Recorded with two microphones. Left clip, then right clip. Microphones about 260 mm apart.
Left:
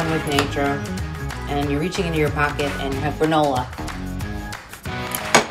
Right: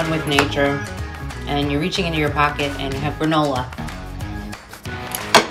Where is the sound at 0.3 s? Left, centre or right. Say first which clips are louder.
Right 6 dB; centre.